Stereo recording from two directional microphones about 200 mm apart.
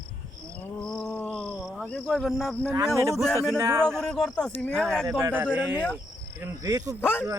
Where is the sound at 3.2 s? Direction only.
5° left (ahead or behind).